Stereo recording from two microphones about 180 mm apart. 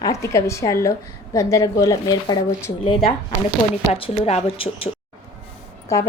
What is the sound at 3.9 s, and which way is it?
Speech, 30° left (ahead or behind).